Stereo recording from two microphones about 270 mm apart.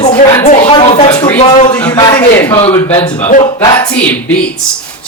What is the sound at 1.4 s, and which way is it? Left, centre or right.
Speech, left.